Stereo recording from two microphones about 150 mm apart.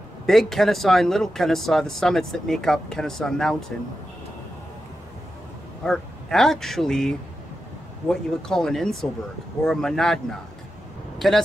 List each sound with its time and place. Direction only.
0.3 s speech: centre (ahead or behind)
5.9 s speech: 5° left (ahead or behind)